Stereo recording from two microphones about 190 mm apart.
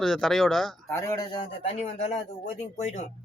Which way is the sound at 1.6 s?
35° left (ahead or behind).